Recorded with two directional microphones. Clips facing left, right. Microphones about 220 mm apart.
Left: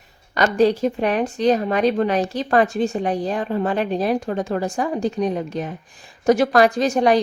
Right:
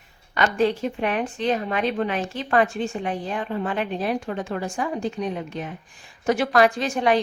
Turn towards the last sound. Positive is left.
turn(degrees=40)  # may be behind; listen again after turning